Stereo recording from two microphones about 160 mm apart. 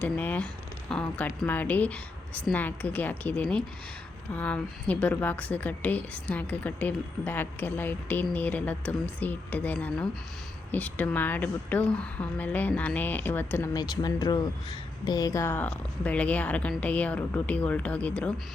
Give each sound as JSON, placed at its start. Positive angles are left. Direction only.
{"t": 0.0, "sound": "a woman's voice", "side_deg": 10}
{"t": 13.7, "sound": "a woman's voice", "side_deg": 25}